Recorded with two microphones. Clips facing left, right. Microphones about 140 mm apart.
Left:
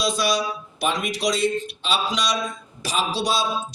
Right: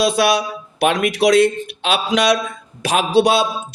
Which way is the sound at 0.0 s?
60° right (ahead or behind).